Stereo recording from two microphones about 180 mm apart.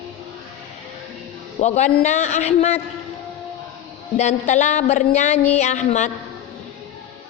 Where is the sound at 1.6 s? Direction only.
40° left (ahead or behind).